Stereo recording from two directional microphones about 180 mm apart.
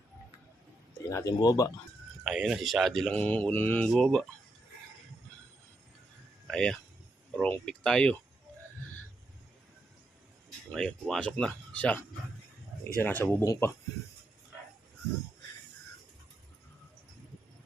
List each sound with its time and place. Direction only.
1.1 s speech: 20° left (ahead or behind)
2.2 s speech: 5° right (ahead or behind)
6.5 s speech: 5° left (ahead or behind)
10.7 s speech: 5° left (ahead or behind)
13.0 s speech: 10° left (ahead or behind)